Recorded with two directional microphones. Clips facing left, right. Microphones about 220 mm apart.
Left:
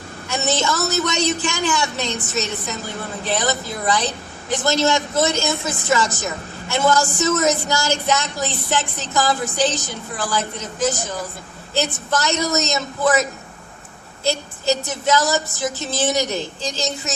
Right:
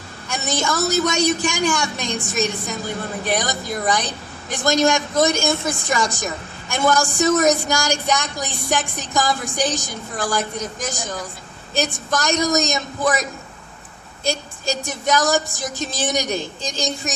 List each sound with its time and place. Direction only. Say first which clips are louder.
0.3 s a woman's voice: left 2 dB; 10° right (ahead or behind)
14.8 s a woman's voice: even; 15° right (ahead or behind)